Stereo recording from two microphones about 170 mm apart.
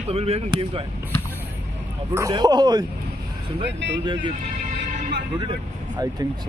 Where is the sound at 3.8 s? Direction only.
90° right.